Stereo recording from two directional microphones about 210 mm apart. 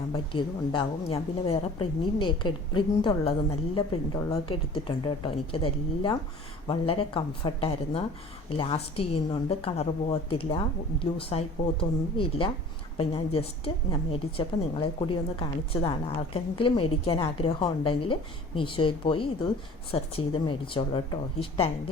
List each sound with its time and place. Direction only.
0.3 s a woman's voice: 25° left (ahead or behind)